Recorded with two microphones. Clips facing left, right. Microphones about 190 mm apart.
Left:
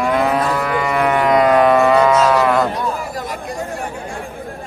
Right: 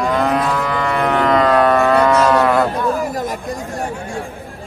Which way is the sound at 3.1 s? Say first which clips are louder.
Right 3 dB; 45° right (ahead or behind).